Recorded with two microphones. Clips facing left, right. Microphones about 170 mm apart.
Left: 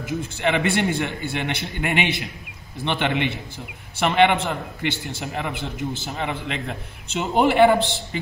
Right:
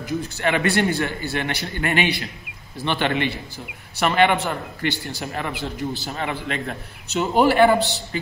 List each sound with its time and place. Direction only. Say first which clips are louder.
0.0 s a man's voice: even; 20° left (ahead or behind)